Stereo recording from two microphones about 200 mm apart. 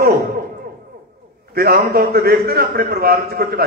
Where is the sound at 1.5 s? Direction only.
50° right (ahead or behind).